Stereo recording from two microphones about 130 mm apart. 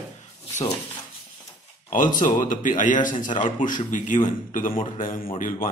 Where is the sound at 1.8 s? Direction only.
90° left.